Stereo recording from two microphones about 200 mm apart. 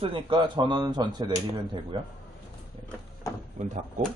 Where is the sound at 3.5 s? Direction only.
35° right (ahead or behind).